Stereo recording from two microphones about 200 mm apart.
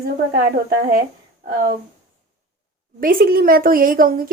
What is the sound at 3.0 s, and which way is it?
A woman's voice, 45° right (ahead or behind).